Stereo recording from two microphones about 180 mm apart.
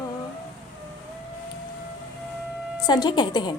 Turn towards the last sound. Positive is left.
turn(degrees=25)  # may be behind; listen again after turning